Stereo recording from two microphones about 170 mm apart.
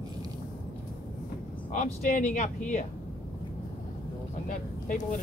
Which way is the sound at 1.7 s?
50° left (ahead or behind).